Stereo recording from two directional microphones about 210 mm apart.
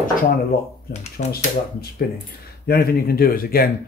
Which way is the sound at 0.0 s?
45° left (ahead or behind).